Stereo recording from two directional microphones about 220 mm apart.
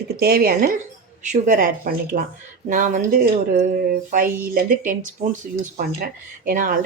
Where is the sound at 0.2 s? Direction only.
45° right (ahead or behind).